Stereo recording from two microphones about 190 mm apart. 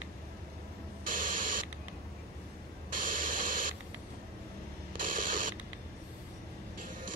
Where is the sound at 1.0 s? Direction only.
45° right (ahead or behind).